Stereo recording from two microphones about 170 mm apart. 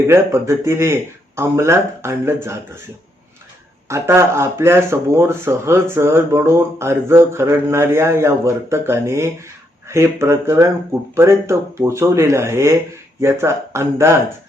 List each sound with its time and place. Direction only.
0.1 s speech: 15° right (ahead or behind)
3.8 s speech: 15° right (ahead or behind)